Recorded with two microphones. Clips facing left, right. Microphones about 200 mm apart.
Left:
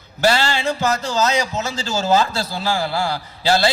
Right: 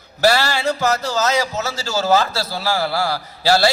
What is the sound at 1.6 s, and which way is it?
A man's voice, 15° left (ahead or behind).